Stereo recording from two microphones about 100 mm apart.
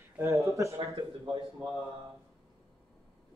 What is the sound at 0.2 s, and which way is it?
Speech, 30° right (ahead or behind).